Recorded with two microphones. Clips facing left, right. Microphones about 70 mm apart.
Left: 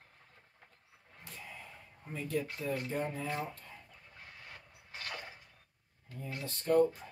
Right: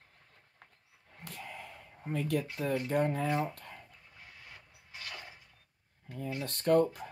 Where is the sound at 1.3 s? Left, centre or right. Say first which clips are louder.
Right 4 dB; right.